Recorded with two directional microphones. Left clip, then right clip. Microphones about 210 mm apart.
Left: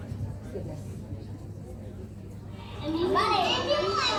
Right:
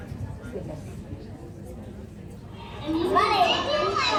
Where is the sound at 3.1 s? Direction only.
30° left (ahead or behind).